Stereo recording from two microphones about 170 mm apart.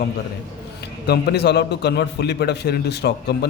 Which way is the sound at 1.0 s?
75° left (ahead or behind).